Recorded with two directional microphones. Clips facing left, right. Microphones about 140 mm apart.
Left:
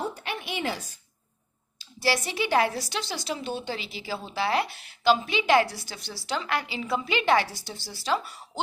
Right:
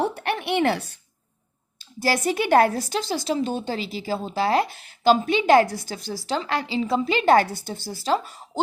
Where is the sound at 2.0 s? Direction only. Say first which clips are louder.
Right 4 dB; 45° right (ahead or behind).